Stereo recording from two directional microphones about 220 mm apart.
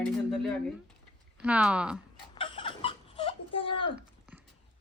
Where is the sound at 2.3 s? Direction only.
25° left (ahead or behind).